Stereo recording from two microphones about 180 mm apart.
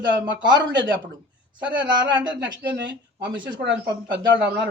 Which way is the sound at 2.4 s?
80° right.